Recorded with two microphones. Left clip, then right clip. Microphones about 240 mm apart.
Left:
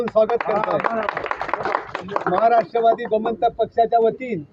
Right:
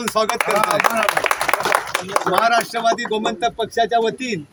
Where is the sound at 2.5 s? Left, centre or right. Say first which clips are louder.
Left 1 dB; centre.